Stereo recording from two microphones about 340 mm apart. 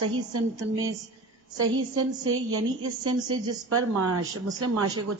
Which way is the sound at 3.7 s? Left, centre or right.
Right.